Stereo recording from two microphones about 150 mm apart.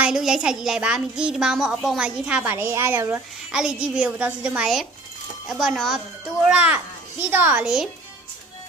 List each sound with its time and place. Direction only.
0.0 s a woman's voice: 5° right (ahead or behind)